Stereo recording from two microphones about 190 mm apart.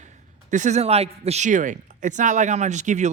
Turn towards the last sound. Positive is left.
turn(degrees=-40)  # may be behind; listen again after turning